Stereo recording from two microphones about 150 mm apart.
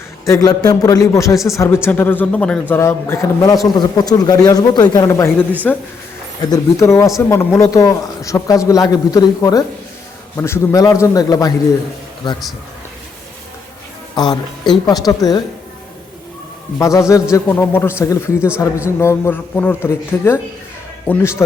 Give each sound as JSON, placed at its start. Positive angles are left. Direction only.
{"t": 0.3, "sound": "a man's voice", "side_deg": 25}
{"t": 5.7, "sound": "speech", "side_deg": 5}
{"t": 6.5, "sound": "speech", "side_deg": 20}
{"t": 14.2, "sound": "speech", "side_deg": 30}
{"t": 16.7, "sound": "a man's voice", "side_deg": 20}
{"t": 18.3, "sound": "speech", "side_deg": -10}
{"t": 18.9, "sound": "a man's voice", "side_deg": 20}